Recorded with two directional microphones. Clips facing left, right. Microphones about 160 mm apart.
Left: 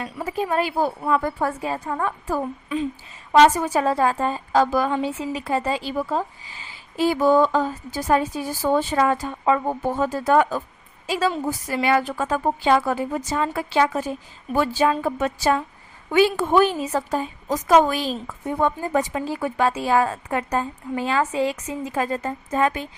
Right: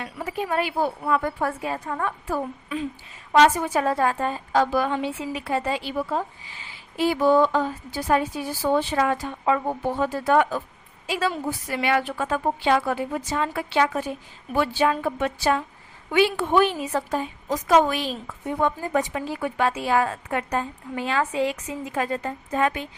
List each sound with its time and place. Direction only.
0.0 s a woman's voice: 30° left (ahead or behind)
3.3 s a woman's voice: 30° left (ahead or behind)